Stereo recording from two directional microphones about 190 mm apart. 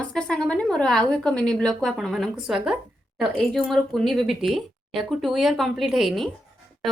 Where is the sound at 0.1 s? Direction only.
5° left (ahead or behind).